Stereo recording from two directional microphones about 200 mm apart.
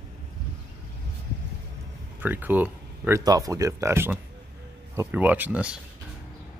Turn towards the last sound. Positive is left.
turn(degrees=-5)  # may be behind; listen again after turning